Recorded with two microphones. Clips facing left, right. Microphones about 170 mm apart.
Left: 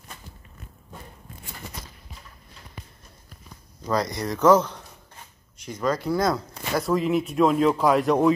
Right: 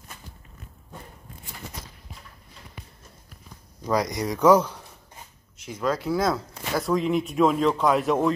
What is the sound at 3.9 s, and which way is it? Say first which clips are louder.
Speech: right 1 dB; 15° right (ahead or behind).